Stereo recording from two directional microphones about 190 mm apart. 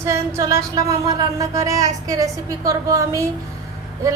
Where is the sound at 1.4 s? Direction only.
15° right (ahead or behind).